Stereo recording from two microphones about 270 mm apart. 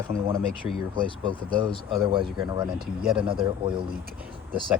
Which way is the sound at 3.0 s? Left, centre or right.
Centre.